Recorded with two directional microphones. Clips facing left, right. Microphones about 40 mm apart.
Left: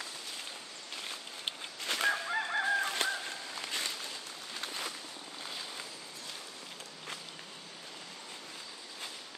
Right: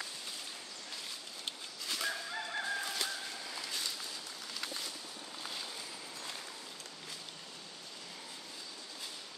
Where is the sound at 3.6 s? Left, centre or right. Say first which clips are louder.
Left 5 dB; left.